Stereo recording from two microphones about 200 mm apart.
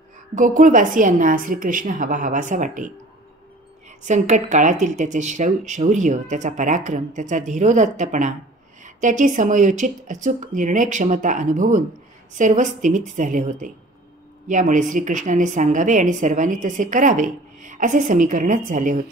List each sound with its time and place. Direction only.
0.3 s a woman's voice: 40° right (ahead or behind)
4.0 s a woman's voice: 35° right (ahead or behind)